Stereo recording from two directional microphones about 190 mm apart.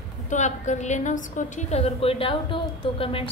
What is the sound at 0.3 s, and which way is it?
A woman's voice, 40° left (ahead or behind).